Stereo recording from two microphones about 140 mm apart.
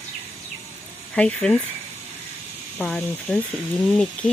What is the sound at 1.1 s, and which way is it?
Speech, 5° left (ahead or behind).